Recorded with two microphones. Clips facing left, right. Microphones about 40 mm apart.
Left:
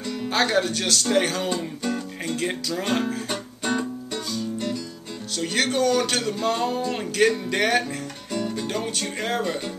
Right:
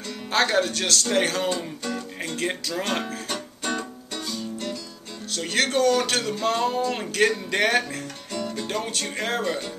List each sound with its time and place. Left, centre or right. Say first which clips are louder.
0.3 s speech: even; centre
5.3 s speech: even; centre
8.3 s music: left 2 dB; centre